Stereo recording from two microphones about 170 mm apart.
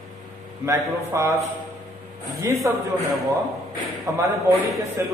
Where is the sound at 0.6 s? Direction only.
20° right (ahead or behind).